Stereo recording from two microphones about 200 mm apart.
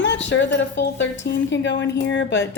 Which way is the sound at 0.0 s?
65° left (ahead or behind).